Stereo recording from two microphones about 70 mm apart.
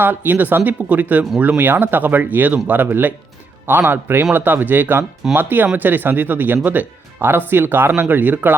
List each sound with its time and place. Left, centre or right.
0.0 s speech: right